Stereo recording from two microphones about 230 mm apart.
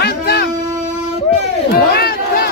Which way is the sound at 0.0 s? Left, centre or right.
Left.